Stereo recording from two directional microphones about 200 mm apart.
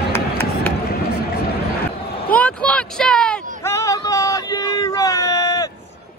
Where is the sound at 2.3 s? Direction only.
5° left (ahead or behind).